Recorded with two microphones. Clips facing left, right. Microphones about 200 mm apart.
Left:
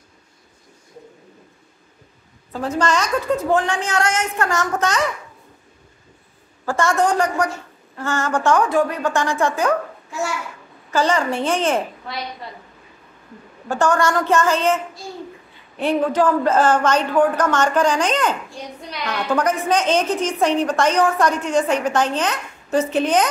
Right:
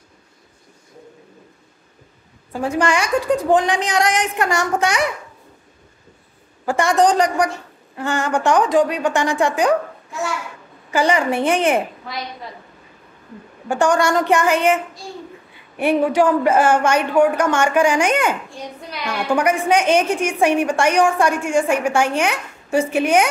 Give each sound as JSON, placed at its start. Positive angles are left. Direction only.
{"t": 2.5, "sound": "a woman's voice", "side_deg": -15}
{"t": 6.6, "sound": "a woman's voice", "side_deg": -15}
{"t": 10.9, "sound": "a woman's voice", "side_deg": -15}
{"t": 13.7, "sound": "a woman's voice", "side_deg": -15}
{"t": 15.8, "sound": "a woman's voice", "side_deg": -15}